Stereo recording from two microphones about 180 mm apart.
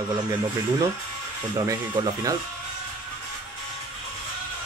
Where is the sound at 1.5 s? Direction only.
20° right (ahead or behind).